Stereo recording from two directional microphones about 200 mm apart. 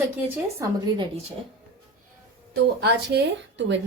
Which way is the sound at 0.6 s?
15° right (ahead or behind).